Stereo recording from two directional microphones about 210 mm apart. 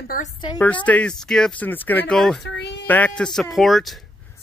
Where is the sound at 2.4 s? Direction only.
55° left (ahead or behind).